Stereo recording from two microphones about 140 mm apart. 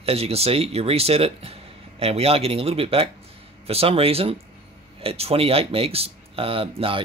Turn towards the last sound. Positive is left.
turn(degrees=-40)  # may be behind; listen again after turning